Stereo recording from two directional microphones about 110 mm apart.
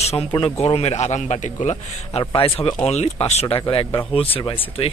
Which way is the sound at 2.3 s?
55° left (ahead or behind).